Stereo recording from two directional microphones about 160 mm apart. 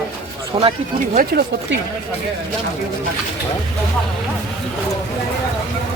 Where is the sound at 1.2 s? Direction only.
90° right.